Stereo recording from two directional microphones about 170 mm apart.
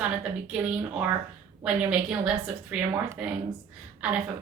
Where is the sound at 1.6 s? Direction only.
5° right (ahead or behind).